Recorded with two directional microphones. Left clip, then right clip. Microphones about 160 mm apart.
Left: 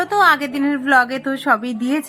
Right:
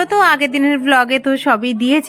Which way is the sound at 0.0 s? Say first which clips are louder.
Right 2 dB; 25° right (ahead or behind).